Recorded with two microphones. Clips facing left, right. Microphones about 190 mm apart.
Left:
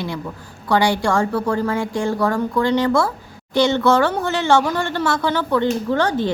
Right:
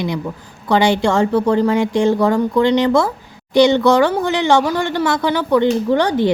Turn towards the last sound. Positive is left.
turn(degrees=-15)  # may be behind; listen again after turning